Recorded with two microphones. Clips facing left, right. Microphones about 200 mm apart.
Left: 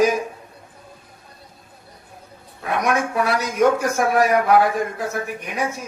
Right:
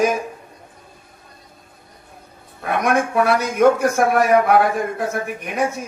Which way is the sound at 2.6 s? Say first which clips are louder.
Right 2 dB; 55° right (ahead or behind).